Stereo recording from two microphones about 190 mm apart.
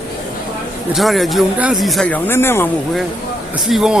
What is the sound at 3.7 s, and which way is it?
Speech, centre (ahead or behind).